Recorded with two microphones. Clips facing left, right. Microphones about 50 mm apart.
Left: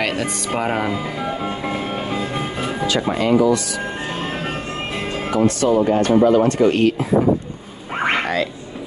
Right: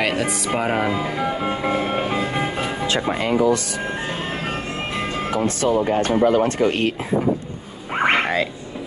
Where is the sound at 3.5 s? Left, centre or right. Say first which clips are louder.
Left 1 dB; right.